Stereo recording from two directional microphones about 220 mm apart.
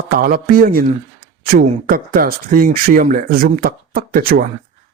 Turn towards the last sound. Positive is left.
turn(degrees=-40)  # may be behind; listen again after turning